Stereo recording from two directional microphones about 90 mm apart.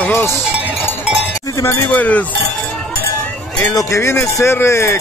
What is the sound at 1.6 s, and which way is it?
Cowbell, 25° left (ahead or behind).